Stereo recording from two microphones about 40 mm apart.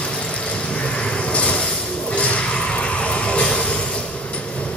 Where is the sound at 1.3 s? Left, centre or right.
Left.